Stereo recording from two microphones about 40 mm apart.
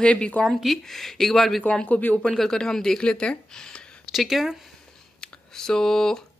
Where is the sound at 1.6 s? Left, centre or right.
Left.